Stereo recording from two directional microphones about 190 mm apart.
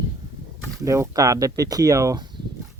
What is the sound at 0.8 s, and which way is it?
Speech, 15° right (ahead or behind).